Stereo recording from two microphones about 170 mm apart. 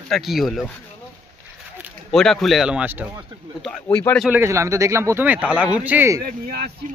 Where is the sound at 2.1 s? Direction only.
Centre (ahead or behind).